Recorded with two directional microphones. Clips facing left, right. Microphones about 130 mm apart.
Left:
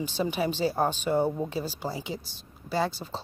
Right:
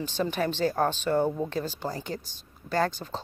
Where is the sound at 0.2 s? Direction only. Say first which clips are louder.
Even; 10° left (ahead or behind).